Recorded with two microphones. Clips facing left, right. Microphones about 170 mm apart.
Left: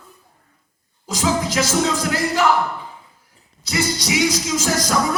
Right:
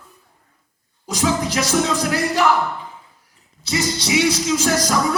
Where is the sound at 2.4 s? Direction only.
Centre (ahead or behind).